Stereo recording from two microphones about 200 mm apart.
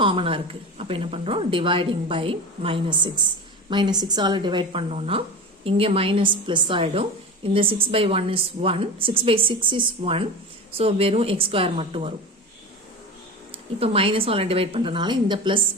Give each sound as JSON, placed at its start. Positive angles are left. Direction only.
{"t": 0.0, "sound": "a woman's voice", "side_deg": -25}
{"t": 13.7, "sound": "a woman's voice", "side_deg": -30}